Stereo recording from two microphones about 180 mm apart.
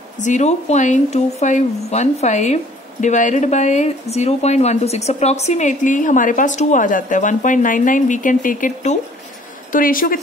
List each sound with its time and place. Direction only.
0.2 s a woman's voice: 40° left (ahead or behind)